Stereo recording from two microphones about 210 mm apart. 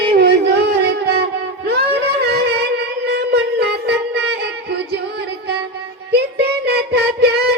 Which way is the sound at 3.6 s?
55° right (ahead or behind).